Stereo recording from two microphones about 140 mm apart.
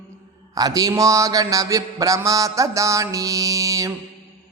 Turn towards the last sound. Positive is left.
turn(degrees=-25)  # may be behind; listen again after turning